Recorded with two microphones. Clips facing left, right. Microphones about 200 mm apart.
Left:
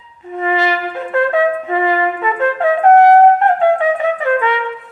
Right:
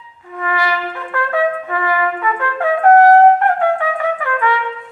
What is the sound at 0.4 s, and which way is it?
Music, 20° left (ahead or behind).